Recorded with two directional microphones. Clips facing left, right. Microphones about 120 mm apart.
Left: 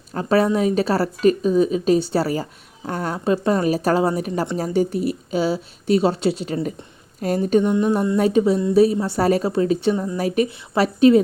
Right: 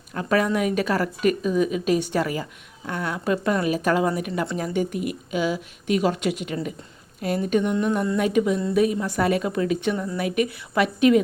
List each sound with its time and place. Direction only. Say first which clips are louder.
0.1 s a woman's voice: left 4 dB; 30° left (ahead or behind)